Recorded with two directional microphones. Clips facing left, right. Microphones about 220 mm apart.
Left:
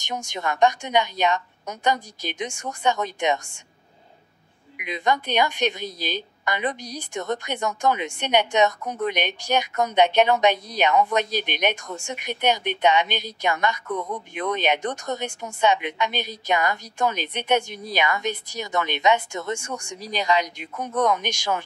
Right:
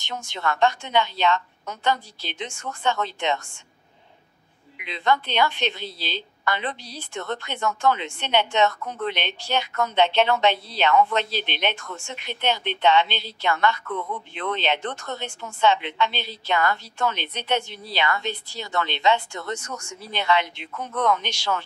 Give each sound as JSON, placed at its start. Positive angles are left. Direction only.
{"t": 0.3, "sound": "a woman's voice", "side_deg": 15}
{"t": 4.7, "sound": "a woman's voice", "side_deg": 15}